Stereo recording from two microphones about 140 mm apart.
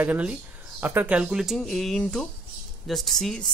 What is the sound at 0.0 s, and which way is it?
Speech, 10° right (ahead or behind).